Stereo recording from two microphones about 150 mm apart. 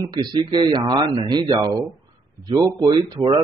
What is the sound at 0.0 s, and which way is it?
Speech, 30° right (ahead or behind).